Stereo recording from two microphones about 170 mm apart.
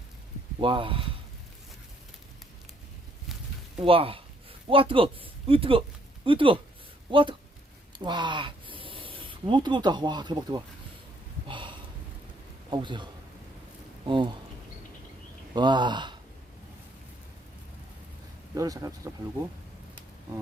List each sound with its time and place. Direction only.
0.6 s speech: 30° right (ahead or behind)
3.8 s speech: 35° right (ahead or behind)
11.4 s a sound: 30° right (ahead or behind)
12.7 s speech: 25° right (ahead or behind)
14.1 s speech: 30° right (ahead or behind)
15.5 s speech: 25° right (ahead or behind)
18.5 s speech: 20° right (ahead or behind)